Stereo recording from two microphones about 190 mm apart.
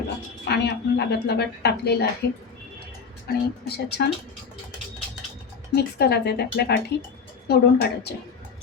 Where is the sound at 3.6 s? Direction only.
60° left (ahead or behind).